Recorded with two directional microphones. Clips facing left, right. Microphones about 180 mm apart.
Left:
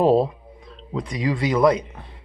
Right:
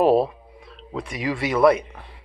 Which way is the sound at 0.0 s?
20° left (ahead or behind).